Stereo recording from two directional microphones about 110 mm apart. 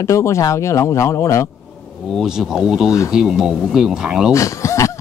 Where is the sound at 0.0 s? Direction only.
25° left (ahead or behind).